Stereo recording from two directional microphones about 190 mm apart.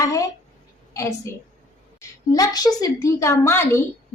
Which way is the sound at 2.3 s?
20° left (ahead or behind).